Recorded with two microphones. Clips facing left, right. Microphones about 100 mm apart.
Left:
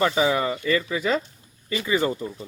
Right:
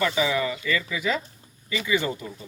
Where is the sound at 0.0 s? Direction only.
35° left (ahead or behind).